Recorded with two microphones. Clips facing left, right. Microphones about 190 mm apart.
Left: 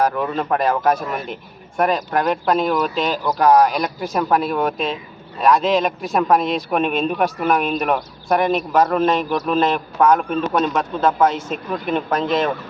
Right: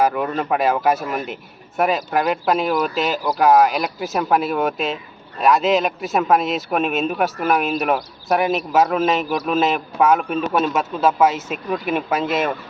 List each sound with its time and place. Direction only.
0.0 s a man's voice: 5° right (ahead or behind)